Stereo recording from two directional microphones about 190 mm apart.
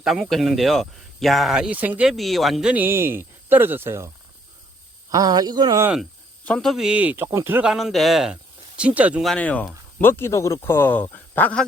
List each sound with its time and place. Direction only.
0.0 s speech: centre (ahead or behind)
5.1 s speech: 20° right (ahead or behind)
5.9 s speech: 5° left (ahead or behind)